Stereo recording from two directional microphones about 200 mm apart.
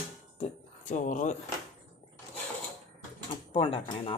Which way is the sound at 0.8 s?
40° left (ahead or behind).